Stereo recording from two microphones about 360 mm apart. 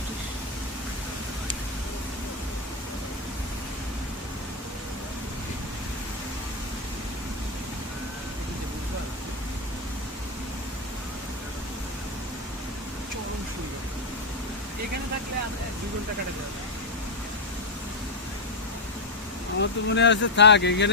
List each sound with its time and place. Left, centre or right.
19.5 s speech: left